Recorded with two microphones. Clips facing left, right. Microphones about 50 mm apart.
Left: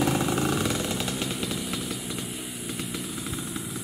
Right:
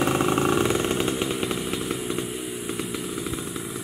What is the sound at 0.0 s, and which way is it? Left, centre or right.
Motorcycle, right.